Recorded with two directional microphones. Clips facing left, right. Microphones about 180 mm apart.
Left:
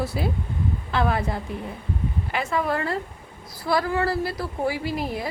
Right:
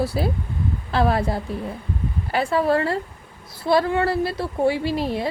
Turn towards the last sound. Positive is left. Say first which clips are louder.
# right 4 dB
turn(degrees=-30)  # may be behind; listen again after turning